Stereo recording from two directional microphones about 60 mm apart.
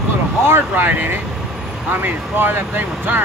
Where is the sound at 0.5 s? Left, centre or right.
Right.